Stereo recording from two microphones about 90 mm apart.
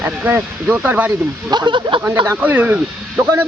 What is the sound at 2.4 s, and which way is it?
Speech, 20° right (ahead or behind).